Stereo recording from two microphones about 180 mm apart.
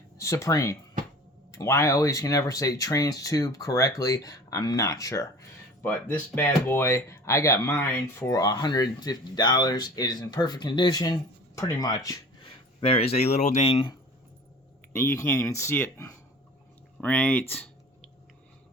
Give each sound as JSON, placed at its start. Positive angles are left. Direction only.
{"t": 0.2, "sound": "speech", "side_deg": 15}
{"t": 12.8, "sound": "speech", "side_deg": 30}
{"t": 14.9, "sound": "speech", "side_deg": 15}
{"t": 17.0, "sound": "a sound", "side_deg": 5}